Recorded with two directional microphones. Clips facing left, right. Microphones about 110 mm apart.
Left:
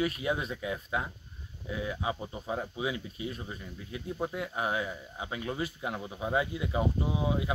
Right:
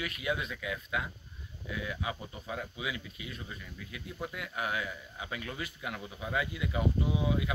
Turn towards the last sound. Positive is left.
turn(degrees=30)  # may be behind; listen again after turning